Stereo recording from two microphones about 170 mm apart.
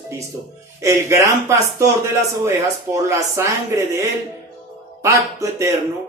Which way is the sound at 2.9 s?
15° right (ahead or behind).